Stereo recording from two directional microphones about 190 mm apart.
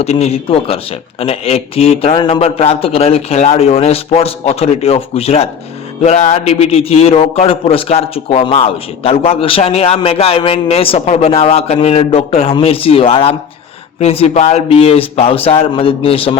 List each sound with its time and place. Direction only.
0.0 s a man's voice: 35° left (ahead or behind)